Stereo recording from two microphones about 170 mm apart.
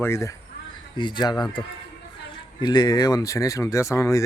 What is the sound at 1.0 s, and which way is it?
A man's voice, 25° left (ahead or behind).